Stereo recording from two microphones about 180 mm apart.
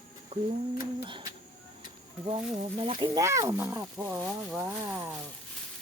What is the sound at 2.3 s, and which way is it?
Speech, 30° right (ahead or behind).